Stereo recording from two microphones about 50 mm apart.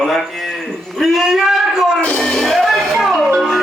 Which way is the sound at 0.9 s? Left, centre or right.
Centre.